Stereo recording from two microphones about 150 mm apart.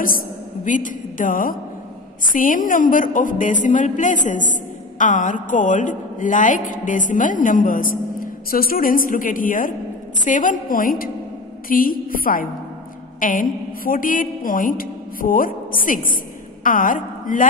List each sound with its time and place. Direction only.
0.7 s a woman's voice: 60° left (ahead or behind)